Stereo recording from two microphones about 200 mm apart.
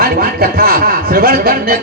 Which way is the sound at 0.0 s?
50° right (ahead or behind).